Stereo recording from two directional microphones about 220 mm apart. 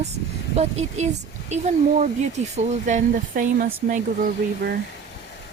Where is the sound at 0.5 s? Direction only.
30° right (ahead or behind).